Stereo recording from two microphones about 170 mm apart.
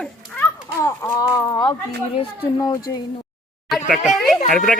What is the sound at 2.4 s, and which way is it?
Speech, 20° left (ahead or behind).